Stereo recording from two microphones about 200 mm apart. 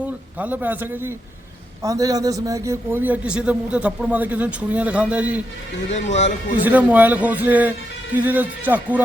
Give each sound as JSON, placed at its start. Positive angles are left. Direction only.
{"t": 0.0, "sound": "a man's voice", "side_deg": -5}
{"t": 5.9, "sound": "speech", "side_deg": 35}
{"t": 6.7, "sound": "a man's voice", "side_deg": -5}